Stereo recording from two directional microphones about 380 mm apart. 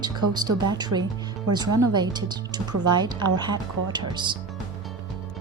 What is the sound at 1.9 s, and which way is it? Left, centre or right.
Speech, centre.